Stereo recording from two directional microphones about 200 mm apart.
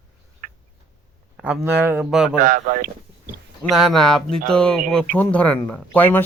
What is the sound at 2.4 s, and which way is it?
Speech, 40° right (ahead or behind).